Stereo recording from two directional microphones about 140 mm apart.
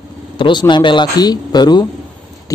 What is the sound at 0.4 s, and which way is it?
Speech, 35° left (ahead or behind).